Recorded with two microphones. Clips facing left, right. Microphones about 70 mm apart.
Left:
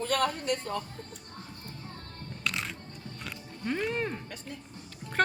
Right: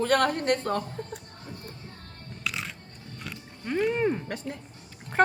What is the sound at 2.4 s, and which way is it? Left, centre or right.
Music, centre.